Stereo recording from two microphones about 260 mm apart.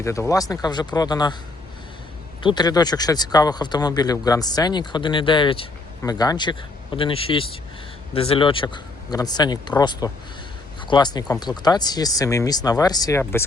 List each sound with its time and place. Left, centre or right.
0.0 s speech: centre
2.4 s speech: centre